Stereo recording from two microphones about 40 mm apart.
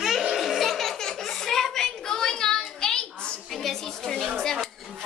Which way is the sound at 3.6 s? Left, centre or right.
Centre.